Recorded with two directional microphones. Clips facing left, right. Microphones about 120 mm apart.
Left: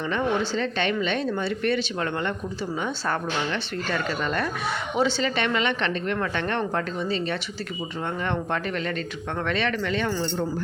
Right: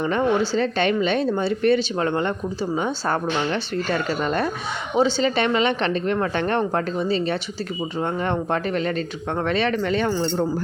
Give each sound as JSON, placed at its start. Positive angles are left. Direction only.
{"t": 0.0, "sound": "speech", "side_deg": -40}